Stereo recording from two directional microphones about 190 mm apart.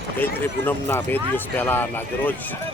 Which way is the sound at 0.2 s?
10° left (ahead or behind).